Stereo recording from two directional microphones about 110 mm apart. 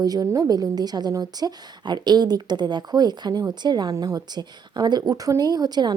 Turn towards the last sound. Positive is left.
turn(degrees=-40)  # may be behind; listen again after turning